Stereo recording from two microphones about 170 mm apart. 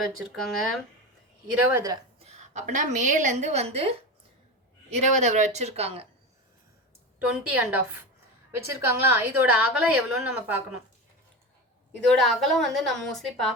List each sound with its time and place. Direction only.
0.0 s a woman's voice: centre (ahead or behind)
1.6 s a woman's voice: 15° right (ahead or behind)
2.2 s a woman's voice: 45° right (ahead or behind)
7.5 s a woman's voice: 10° right (ahead or behind)
11.9 s a woman's voice: 5° left (ahead or behind)